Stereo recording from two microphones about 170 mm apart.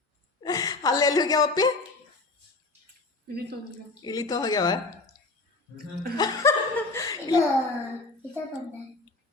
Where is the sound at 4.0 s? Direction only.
25° left (ahead or behind).